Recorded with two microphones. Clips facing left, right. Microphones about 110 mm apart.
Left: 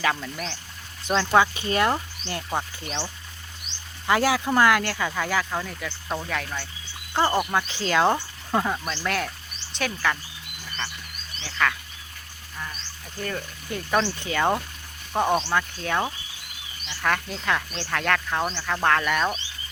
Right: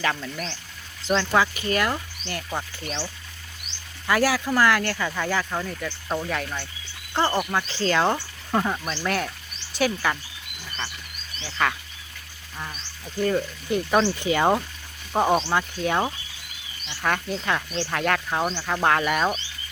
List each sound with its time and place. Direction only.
0.0 s speech: 10° left (ahead or behind)
7.1 s speech: 10° left (ahead or behind)
8.6 s speech: centre (ahead or behind)
11.6 s speech: 20° right (ahead or behind)
13.2 s speech: 20° right (ahead or behind)